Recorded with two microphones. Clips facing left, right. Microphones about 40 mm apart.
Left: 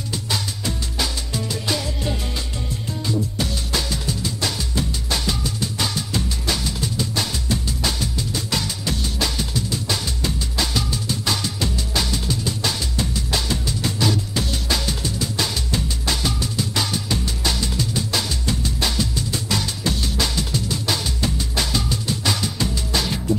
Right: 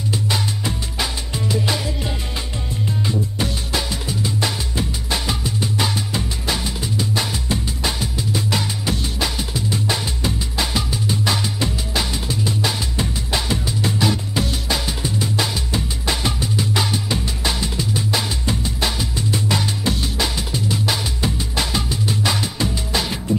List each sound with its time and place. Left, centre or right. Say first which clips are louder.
0.3 s music: right 3 dB; centre
3.1 s music: right 1 dB; centre